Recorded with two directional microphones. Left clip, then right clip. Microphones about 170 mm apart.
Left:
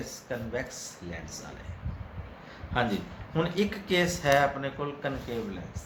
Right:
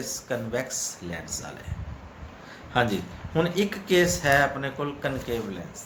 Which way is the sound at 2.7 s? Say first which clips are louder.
Right 4 dB; 30° right (ahead or behind).